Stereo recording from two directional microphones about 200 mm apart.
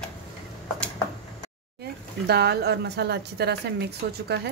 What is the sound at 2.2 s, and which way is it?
A woman's voice, 55° right (ahead or behind).